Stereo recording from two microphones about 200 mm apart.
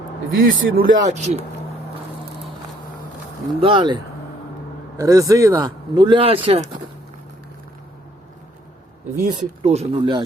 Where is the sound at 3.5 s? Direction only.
25° right (ahead or behind).